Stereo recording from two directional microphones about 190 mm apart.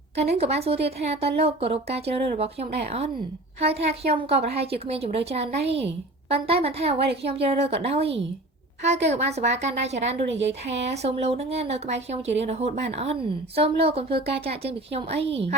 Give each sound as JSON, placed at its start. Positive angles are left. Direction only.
{"t": 0.2, "sound": "a woman's voice", "side_deg": -35}